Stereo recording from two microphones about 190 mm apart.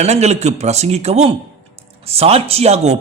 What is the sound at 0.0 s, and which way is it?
Speech, 35° right (ahead or behind).